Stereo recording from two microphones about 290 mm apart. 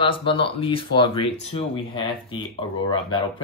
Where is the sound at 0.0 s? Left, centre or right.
Centre.